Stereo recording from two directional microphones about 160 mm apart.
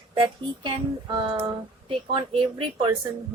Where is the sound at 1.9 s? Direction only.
35° right (ahead or behind).